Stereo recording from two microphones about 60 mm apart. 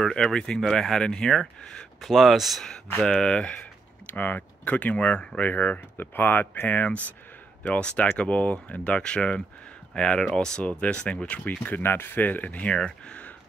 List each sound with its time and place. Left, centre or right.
0.0 s speech: centre
2.0 s speech: centre
3.0 s speech: centre
12.7 s speech: centre